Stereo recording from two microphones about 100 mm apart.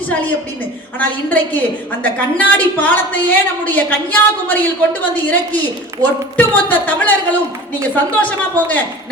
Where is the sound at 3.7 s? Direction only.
15° left (ahead or behind).